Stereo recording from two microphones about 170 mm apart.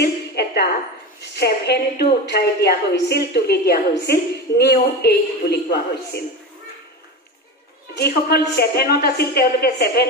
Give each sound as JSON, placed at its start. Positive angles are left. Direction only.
{"t": 0.0, "sound": "a sound", "side_deg": 70}
{"t": 1.3, "sound": "a woman's voice", "side_deg": 70}
{"t": 7.9, "sound": "a woman's voice", "side_deg": 70}